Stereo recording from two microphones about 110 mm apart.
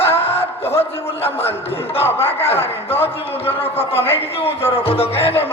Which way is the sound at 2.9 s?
20° left (ahead or behind).